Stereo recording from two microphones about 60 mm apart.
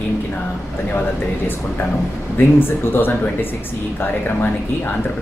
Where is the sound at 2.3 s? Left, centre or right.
Left.